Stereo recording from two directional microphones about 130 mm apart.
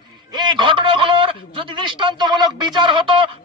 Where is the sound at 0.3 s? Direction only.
35° right (ahead or behind).